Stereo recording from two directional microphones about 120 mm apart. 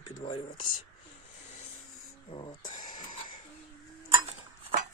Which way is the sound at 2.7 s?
90° left.